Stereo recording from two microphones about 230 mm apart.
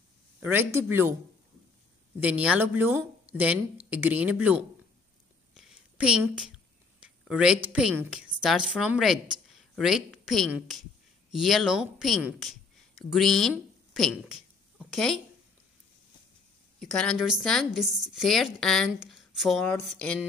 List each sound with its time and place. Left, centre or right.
0.4 s a woman's voice: centre
2.2 s a woman's voice: centre
14.8 s a sound: centre
16.8 s a woman's voice: centre